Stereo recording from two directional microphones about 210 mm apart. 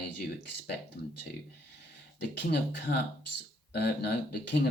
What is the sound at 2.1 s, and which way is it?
Speech, 55° left (ahead or behind).